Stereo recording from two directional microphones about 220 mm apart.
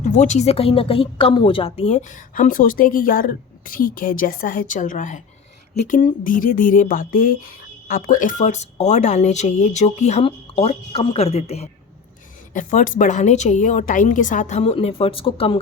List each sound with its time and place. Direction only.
0.0 s speech: 35° left (ahead or behind)